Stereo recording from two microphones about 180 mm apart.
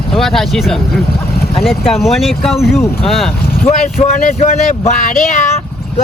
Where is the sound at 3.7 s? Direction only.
35° left (ahead or behind).